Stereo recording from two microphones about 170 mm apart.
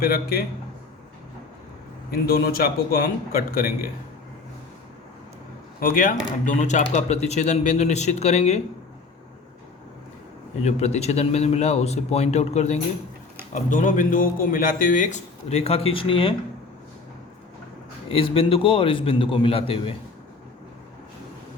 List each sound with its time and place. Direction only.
0.0 s a man's voice: 65° left (ahead or behind)
2.0 s a man's voice: 65° left (ahead or behind)
5.8 s speech: 55° left (ahead or behind); by 8.6 s 40° left (ahead or behind)
10.6 s speech: 40° left (ahead or behind)
13.5 s speech: 50° left (ahead or behind); by 16.3 s 30° left (ahead or behind)
18.1 s speech: 30° left (ahead or behind)